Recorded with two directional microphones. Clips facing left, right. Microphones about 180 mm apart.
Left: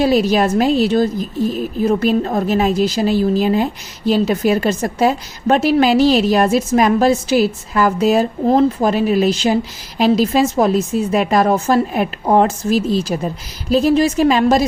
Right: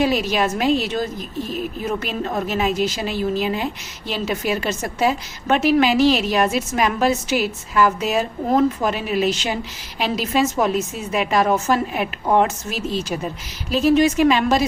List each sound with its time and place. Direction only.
0.0 s a woman's voice: 35° left (ahead or behind)